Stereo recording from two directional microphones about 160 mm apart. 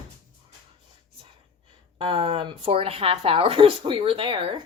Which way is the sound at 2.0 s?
35° right (ahead or behind).